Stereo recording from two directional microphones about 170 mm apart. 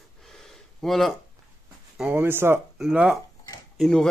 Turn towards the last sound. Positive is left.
turn(degrees=5)  # may be behind; listen again after turning